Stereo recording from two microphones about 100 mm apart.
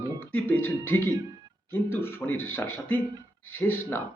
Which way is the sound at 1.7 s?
20° left (ahead or behind).